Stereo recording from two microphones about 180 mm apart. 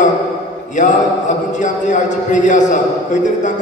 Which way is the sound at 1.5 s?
45° left (ahead or behind).